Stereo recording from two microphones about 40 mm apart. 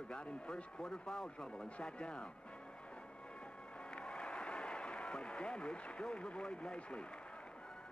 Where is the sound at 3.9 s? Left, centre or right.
Left.